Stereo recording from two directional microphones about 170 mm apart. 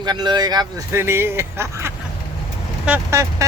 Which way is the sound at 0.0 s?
25° right (ahead or behind).